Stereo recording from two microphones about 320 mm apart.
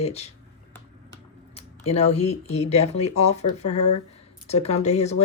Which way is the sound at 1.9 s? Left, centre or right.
Centre.